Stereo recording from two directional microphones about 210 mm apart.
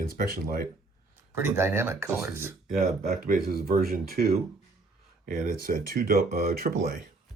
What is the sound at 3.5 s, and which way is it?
Speech, 45° right (ahead or behind).